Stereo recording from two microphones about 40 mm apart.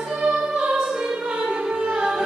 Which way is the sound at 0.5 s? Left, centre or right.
Right.